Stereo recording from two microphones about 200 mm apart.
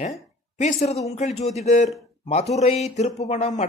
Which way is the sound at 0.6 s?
35° left (ahead or behind).